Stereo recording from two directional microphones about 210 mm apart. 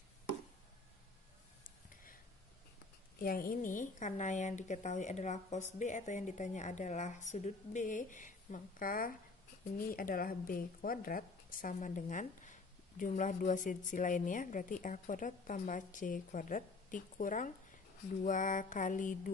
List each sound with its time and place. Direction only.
3.2 s a woman's voice: 40° left (ahead or behind)